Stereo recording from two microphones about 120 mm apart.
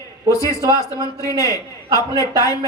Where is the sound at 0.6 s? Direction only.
30° right (ahead or behind).